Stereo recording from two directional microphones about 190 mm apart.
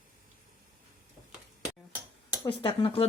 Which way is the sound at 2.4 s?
25° left (ahead or behind).